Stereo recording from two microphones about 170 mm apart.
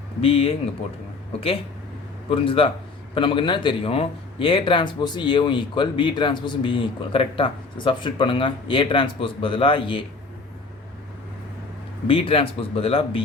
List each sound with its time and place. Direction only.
0.2 s speech: 35° left (ahead or behind)
2.3 s speech: 30° left (ahead or behind)
12.0 s speech: 30° left (ahead or behind)